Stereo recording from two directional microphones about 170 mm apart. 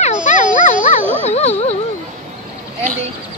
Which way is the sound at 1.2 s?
40° left (ahead or behind).